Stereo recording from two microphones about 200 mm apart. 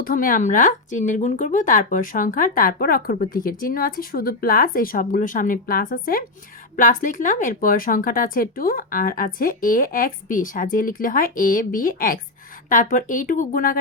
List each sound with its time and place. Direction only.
0.0 s speech: 45° left (ahead or behind)